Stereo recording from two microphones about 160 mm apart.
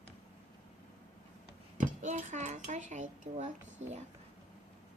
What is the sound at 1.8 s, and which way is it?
Speech, 50° right (ahead or behind).